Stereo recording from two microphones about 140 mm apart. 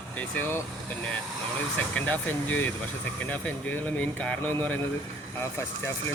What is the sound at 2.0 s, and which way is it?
Speech, 15° left (ahead or behind).